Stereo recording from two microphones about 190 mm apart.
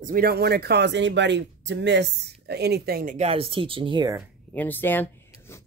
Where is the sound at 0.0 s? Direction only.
50° right (ahead or behind).